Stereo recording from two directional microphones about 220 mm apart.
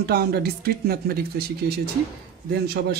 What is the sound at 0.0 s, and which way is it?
Speech, 45° right (ahead or behind).